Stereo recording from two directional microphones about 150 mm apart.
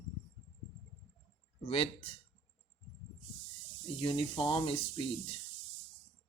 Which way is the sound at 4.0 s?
35° left (ahead or behind).